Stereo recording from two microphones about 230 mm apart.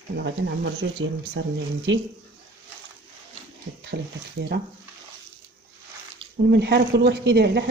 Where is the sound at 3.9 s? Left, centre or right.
Right.